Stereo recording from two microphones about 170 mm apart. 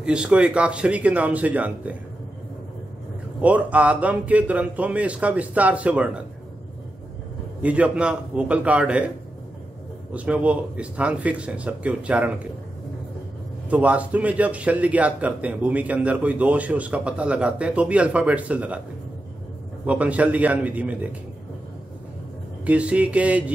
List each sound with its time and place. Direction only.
0.0 s a man's voice: 5° right (ahead or behind)
3.3 s a man's voice: 10° right (ahead or behind)
7.6 s a man's voice: 5° right (ahead or behind)
10.1 s a man's voice: 10° right (ahead or behind)
13.7 s a man's voice: 10° right (ahead or behind)
19.9 s a man's voice: 10° right (ahead or behind)
22.7 s a man's voice: 5° right (ahead or behind)